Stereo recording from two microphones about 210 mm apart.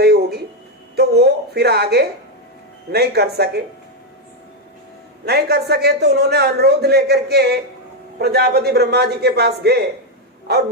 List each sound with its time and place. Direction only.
0.0 s a sound: 50° right (ahead or behind)
2.9 s a man's voice: 50° right (ahead or behind)
5.2 s a man's voice: 50° right (ahead or behind)